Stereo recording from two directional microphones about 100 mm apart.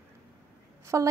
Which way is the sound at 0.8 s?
30° right (ahead or behind).